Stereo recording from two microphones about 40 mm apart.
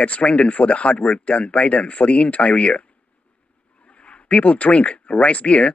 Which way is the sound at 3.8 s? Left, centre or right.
Left.